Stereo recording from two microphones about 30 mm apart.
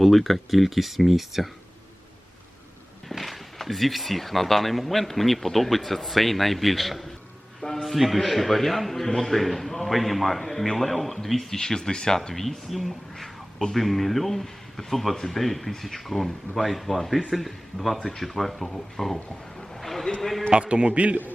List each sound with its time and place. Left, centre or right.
0.0 s speech: centre
3.1 s speech: centre
11.5 s speech: centre
12.3 s a man's voice: centre
20.5 s a man's voice: right